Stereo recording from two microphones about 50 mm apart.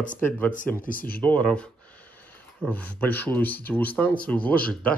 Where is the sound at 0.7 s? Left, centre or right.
Left.